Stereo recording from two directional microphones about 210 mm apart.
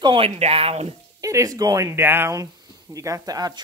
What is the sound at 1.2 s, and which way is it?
Speech, 15° right (ahead or behind).